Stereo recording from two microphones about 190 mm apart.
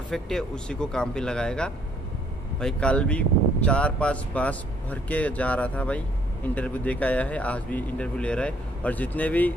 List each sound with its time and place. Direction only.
0.1 s speech: 5° left (ahead or behind)